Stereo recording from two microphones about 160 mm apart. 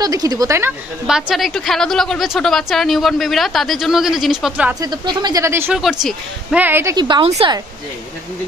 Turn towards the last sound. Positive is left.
turn(degrees=-40)  # may be behind; listen again after turning